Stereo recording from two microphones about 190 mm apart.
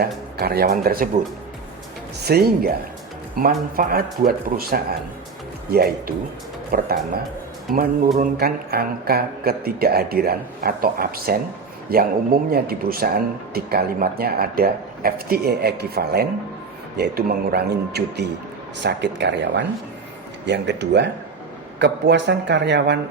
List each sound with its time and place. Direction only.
0.0 s speech: 55° right (ahead or behind)
2.2 s a man's voice: 55° right (ahead or behind)